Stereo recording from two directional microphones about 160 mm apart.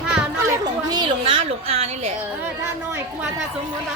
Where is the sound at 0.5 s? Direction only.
25° right (ahead or behind).